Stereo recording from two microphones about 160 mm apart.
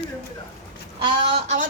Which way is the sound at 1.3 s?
45° right (ahead or behind).